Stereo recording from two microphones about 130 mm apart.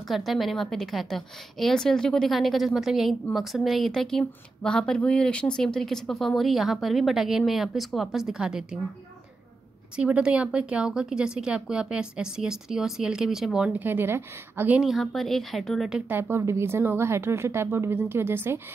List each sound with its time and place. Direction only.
0.1 s speech: centre (ahead or behind)
9.9 s speech: 10° right (ahead or behind)
13.8 s a woman's voice: 15° right (ahead or behind)
14.8 s speech: centre (ahead or behind)
16.1 s a woman's voice: 15° right (ahead or behind)